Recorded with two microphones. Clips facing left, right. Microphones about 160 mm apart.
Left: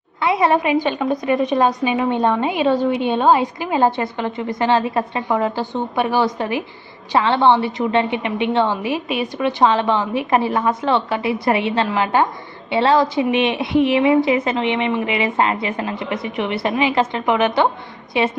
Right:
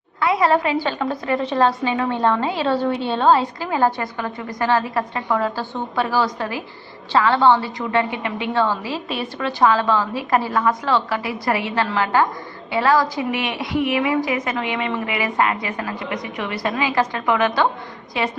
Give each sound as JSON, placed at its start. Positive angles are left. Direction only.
{"t": 0.2, "sound": "a woman's voice", "side_deg": 25}